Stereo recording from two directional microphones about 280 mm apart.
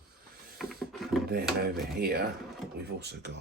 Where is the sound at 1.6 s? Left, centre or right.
Right.